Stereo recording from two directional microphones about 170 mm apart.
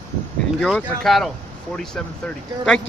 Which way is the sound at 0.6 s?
Centre (ahead or behind).